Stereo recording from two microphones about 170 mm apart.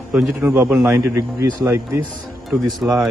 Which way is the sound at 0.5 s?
10° right (ahead or behind).